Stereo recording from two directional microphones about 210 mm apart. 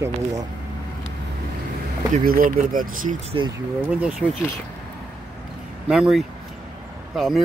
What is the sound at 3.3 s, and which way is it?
Speech, 20° right (ahead or behind).